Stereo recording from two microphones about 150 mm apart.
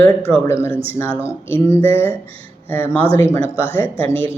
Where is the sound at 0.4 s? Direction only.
15° left (ahead or behind).